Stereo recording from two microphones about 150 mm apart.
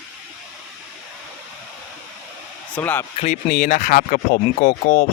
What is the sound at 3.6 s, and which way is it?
Speech, 55° left (ahead or behind).